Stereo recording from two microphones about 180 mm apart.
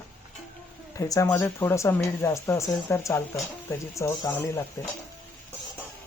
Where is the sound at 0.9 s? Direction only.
20° left (ahead or behind).